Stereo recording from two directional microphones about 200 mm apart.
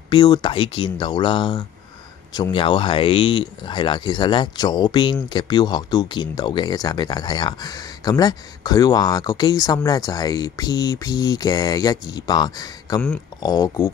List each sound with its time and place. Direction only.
0.1 s speech: 20° left (ahead or behind)